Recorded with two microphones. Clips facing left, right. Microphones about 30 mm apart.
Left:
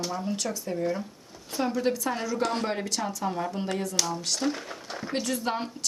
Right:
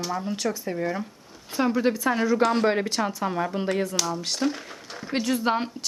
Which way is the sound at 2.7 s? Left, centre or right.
Right.